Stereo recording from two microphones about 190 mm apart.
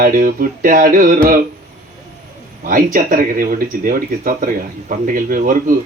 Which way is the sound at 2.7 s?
50° right (ahead or behind).